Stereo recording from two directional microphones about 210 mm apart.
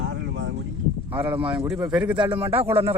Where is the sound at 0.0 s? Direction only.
55° right (ahead or behind).